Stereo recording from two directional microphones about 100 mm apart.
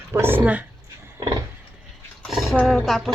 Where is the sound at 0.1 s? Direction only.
25° right (ahead or behind).